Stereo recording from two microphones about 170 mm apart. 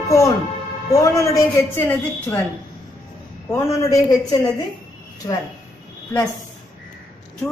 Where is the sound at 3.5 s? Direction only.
15° left (ahead or behind).